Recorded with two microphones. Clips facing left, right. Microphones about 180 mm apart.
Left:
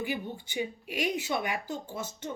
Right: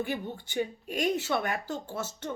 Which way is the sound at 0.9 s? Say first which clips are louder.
Right 2 dB; 45° right (ahead or behind).